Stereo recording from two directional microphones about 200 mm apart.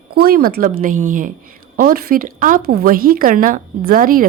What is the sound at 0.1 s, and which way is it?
Speech, 50° right (ahead or behind).